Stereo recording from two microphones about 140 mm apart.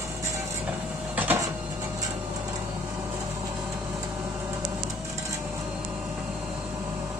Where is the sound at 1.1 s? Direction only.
10° right (ahead or behind).